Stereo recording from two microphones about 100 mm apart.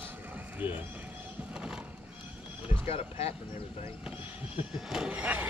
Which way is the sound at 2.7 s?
75° left (ahead or behind).